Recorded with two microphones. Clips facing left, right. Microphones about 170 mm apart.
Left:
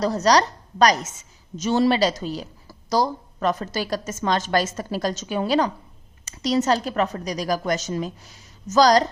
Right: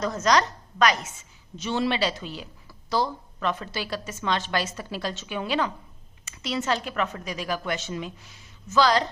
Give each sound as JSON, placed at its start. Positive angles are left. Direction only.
{"t": 0.0, "sound": "a woman's voice", "side_deg": 35}